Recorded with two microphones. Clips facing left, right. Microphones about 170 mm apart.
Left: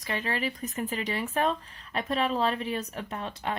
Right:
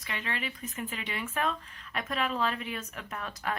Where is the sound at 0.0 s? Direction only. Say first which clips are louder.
Left 6 dB; 35° left (ahead or behind).